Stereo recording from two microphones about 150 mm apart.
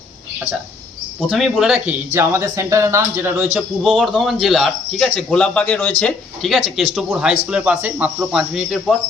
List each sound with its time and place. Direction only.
1.3 s speech: centre (ahead or behind)
3.8 s speech: centre (ahead or behind)